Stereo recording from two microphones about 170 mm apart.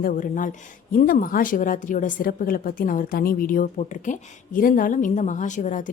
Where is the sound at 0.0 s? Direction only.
50° left (ahead or behind).